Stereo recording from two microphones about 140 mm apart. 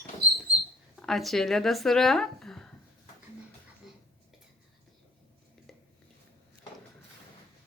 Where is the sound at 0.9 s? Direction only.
Centre (ahead or behind).